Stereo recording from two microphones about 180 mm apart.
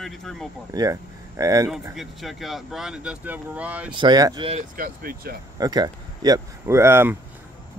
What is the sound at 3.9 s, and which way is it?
Speech, 25° right (ahead or behind).